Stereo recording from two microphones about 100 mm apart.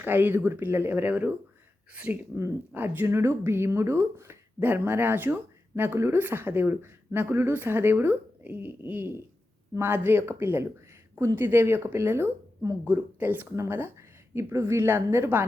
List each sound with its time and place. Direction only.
0.0 s speech: 20° right (ahead or behind)
2.3 s speech: 20° right (ahead or behind)